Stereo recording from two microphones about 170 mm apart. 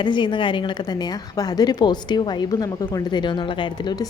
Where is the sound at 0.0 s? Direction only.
25° left (ahead or behind).